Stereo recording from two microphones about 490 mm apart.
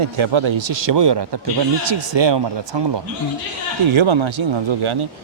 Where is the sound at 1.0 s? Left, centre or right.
Right.